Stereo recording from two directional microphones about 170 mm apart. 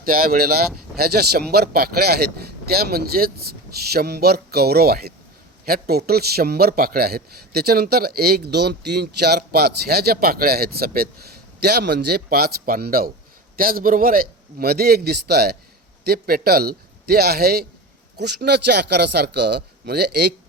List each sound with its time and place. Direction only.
0.0 s a man's voice: 60° right (ahead or behind)